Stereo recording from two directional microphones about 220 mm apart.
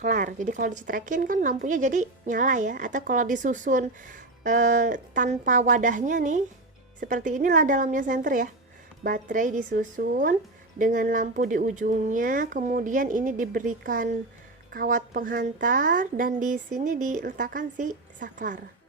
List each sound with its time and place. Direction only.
0.0 s a woman's voice: 35° right (ahead or behind)